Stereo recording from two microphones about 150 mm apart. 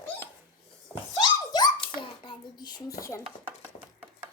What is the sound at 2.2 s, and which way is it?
Speech, 25° left (ahead or behind).